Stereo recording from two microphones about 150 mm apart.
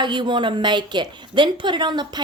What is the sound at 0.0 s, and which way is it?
Speech, 30° right (ahead or behind).